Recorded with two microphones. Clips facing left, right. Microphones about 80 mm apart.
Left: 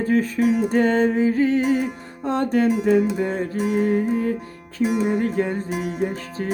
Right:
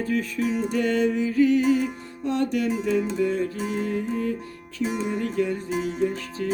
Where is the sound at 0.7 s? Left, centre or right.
Left.